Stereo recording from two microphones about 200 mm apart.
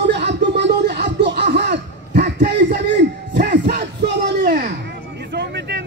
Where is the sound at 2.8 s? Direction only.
60° right (ahead or behind).